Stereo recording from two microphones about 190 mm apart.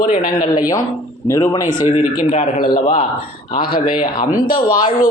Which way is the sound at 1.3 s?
15° left (ahead or behind).